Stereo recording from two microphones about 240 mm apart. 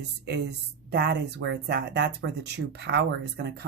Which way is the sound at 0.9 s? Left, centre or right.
Right.